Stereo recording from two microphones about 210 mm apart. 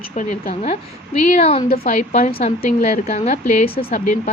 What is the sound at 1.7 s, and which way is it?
A woman's voice, 40° left (ahead or behind).